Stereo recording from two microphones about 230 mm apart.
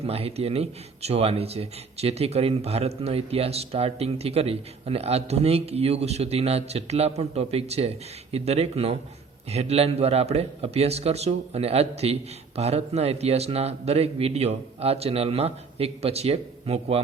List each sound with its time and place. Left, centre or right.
0.0 s speech: right